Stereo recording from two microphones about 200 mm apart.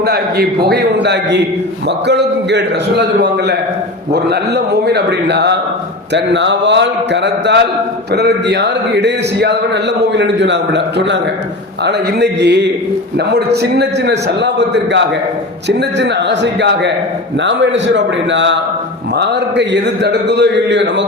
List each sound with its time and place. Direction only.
0.0 s a man's voice: 55° right (ahead or behind)